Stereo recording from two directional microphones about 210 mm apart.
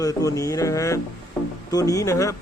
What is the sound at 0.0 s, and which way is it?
Speech, 15° left (ahead or behind).